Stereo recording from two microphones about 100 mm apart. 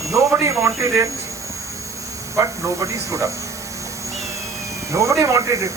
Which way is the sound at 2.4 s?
30° right (ahead or behind).